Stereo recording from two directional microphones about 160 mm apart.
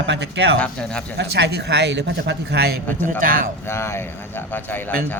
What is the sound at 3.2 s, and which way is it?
Speech, 60° right (ahead or behind).